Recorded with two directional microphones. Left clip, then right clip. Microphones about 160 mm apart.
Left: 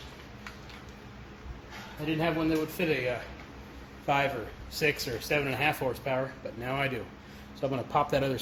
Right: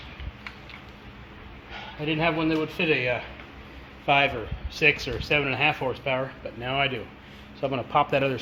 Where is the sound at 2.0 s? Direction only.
55° right (ahead or behind).